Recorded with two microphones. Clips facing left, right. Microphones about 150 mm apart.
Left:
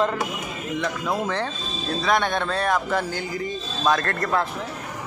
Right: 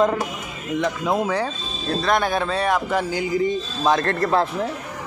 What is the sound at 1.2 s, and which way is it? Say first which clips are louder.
Speech: right 3 dB; 10° right (ahead or behind).